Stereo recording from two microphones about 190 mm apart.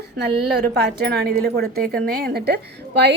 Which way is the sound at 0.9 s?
55° right (ahead or behind).